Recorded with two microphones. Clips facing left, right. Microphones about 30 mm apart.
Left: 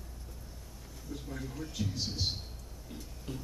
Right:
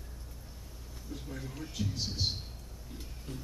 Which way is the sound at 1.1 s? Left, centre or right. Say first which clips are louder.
Left 1 dB; centre.